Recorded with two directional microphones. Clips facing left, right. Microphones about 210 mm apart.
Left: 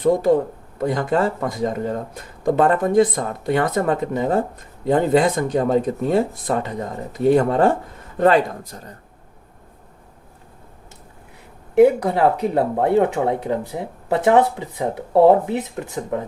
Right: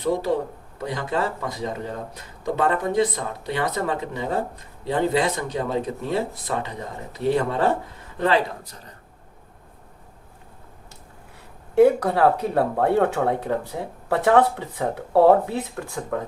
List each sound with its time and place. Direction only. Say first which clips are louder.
0.0 s speech: left 6 dB; 50° left (ahead or behind)
11.8 s speech: left 2 dB; 20° left (ahead or behind)